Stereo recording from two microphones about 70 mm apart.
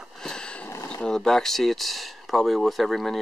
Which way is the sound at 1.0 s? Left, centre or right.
Centre.